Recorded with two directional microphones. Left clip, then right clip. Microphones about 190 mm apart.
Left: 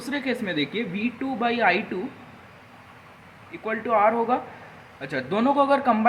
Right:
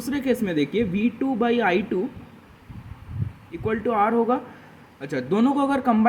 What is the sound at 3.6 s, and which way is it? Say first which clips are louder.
A man's voice: left 1 dB; 35° right (ahead or behind).